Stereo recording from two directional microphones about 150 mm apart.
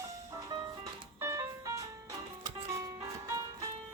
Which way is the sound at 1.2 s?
20° right (ahead or behind).